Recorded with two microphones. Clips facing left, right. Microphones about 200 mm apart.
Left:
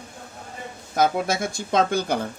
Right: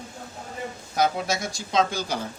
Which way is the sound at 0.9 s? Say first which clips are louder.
Left 3 dB; 50° left (ahead or behind).